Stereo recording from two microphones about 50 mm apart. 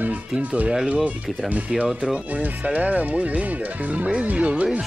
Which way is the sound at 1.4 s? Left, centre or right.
Right.